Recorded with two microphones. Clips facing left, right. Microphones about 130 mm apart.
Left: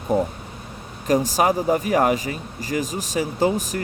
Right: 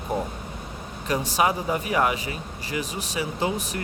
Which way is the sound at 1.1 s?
40° left (ahead or behind).